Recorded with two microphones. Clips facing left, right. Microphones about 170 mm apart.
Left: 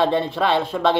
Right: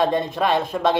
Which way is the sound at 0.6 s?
15° right (ahead or behind).